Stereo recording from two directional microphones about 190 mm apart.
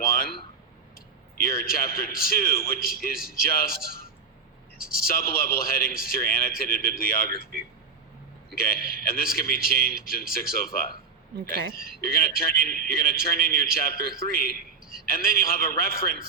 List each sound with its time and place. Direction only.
0.9 s a man's voice: 50° left (ahead or behind)